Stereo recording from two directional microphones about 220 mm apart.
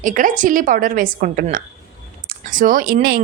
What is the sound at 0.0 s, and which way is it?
A woman's voice, 35° right (ahead or behind).